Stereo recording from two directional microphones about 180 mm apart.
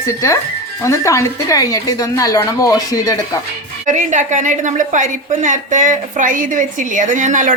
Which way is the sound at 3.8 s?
45° right (ahead or behind).